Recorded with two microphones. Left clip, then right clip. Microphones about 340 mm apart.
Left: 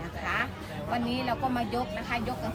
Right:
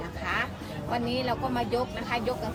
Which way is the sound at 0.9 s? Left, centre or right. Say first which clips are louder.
Right 1 dB; centre.